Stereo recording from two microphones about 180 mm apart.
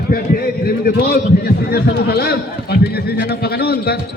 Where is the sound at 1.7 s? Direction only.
60° left (ahead or behind).